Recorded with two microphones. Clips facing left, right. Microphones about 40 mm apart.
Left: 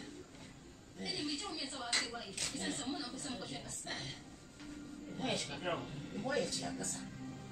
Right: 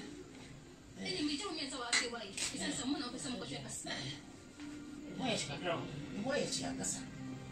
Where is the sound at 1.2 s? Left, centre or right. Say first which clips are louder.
Right 3 dB; right.